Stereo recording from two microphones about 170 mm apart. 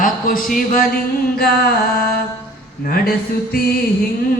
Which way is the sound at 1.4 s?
65° left (ahead or behind).